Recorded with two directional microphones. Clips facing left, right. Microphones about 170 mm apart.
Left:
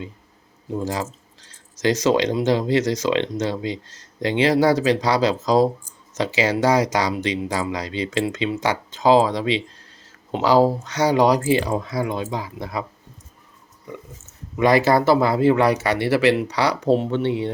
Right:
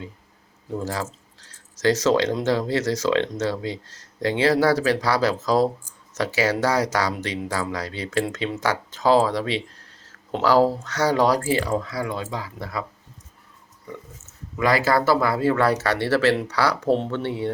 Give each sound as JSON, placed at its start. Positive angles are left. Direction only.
{"t": 1.4, "sound": "speech", "side_deg": 15}
{"t": 14.5, "sound": "speech", "side_deg": 20}